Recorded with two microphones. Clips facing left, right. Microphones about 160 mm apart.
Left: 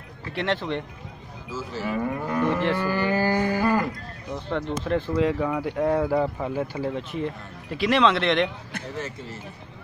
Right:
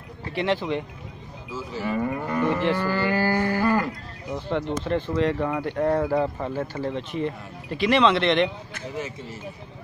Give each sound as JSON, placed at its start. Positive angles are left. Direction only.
{"t": 0.4, "sound": "speech", "side_deg": -5}
{"t": 2.9, "sound": "livestock", "side_deg": 15}
{"t": 4.5, "sound": "speech", "side_deg": 0}